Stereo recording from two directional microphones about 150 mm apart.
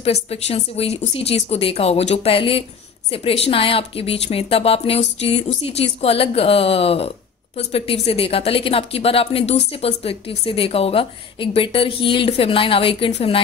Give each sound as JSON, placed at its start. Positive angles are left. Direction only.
{"t": 0.0, "sound": "speech", "side_deg": 40}